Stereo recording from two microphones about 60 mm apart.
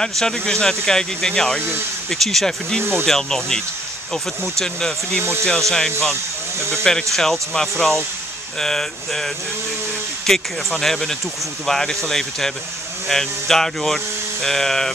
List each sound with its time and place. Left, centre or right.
0.0 s speech: centre
2.8 s speech: right
3.1 s speech: centre